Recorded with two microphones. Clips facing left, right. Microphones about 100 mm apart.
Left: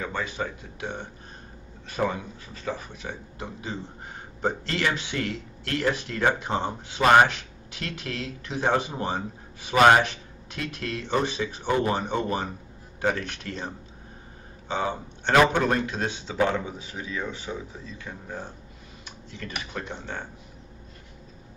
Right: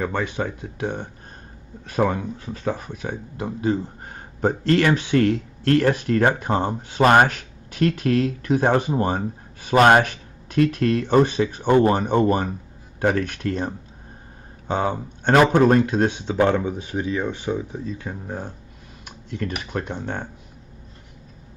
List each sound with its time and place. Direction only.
0.0 s speech: 50° right (ahead or behind)
19.0 s tick-tock: 50° right (ahead or behind)
19.6 s speech: 50° right (ahead or behind)